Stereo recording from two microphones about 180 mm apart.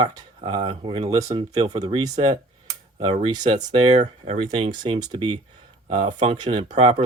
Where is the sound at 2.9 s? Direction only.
35° right (ahead or behind).